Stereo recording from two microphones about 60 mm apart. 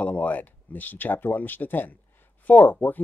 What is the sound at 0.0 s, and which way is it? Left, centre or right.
Speech, left.